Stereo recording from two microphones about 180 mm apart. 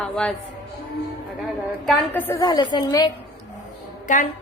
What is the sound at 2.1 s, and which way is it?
A woman's voice, 10° left (ahead or behind).